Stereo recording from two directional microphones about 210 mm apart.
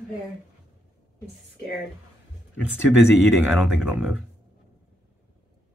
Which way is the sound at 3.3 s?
5° right (ahead or behind).